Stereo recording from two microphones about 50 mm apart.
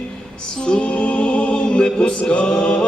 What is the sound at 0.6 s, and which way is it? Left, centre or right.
Music, centre.